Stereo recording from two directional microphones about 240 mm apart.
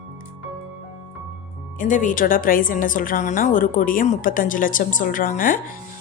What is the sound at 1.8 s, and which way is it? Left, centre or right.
Speech, left.